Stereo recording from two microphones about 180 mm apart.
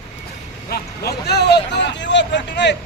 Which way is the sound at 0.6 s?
60° left (ahead or behind).